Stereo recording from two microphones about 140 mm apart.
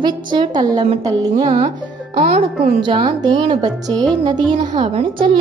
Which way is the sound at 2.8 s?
35° right (ahead or behind).